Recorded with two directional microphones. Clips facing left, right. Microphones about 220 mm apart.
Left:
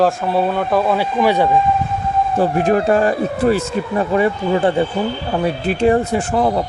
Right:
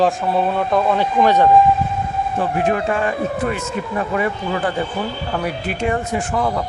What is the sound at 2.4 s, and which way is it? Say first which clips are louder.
Speech: left 4 dB; 40° left (ahead or behind).